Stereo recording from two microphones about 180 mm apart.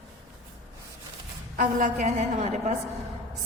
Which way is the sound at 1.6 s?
45° right (ahead or behind).